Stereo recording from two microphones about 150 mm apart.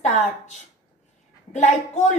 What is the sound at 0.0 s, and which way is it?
A woman's voice, 55° left (ahead or behind).